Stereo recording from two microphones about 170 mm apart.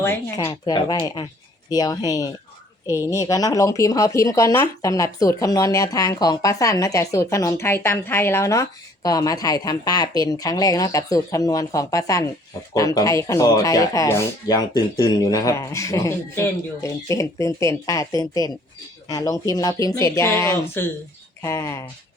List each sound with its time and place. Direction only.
0.0 s speech: 15° left (ahead or behind)
2.8 s a woman's voice: 15° right (ahead or behind)
3.1 s speech: 20° left (ahead or behind)